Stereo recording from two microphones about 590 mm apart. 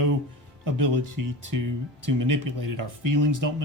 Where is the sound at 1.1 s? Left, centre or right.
Right.